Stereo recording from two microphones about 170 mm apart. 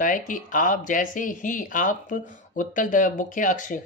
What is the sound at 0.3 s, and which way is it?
Speech, 50° left (ahead or behind).